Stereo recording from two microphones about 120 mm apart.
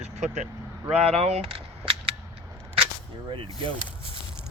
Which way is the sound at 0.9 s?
65° right (ahead or behind).